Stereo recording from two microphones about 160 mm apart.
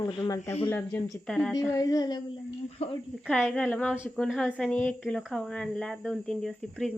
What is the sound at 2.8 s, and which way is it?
Speech, 40° left (ahead or behind).